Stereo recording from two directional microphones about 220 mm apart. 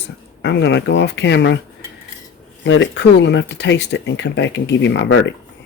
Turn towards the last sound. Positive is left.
turn(degrees=50)  # may be behind; listen again after turning